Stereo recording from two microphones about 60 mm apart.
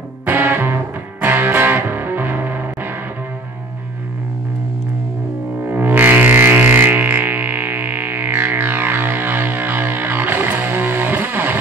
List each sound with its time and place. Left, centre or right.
0.2 s music: right
5.7 s music: right